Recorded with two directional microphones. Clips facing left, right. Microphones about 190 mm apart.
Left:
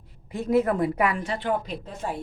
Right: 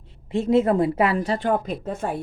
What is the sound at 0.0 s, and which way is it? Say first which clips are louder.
A woman's voice: right 7 dB; 25° right (ahead or behind).